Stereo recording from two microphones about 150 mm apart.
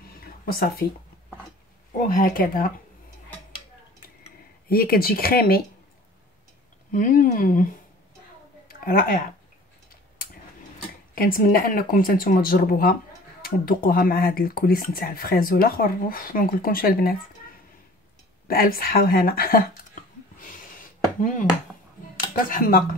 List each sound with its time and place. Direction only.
0.2 s a sound: 80° left
2.0 s speech: 65° left (ahead or behind)
4.6 s speech: 80° left
6.9 s speech: 65° left (ahead or behind)
8.6 s a sound: 75° left (ahead or behind)
11.1 s speech: 75° left (ahead or behind)
18.5 s speech: 75° left (ahead or behind)
21.2 s speech: 65° left (ahead or behind)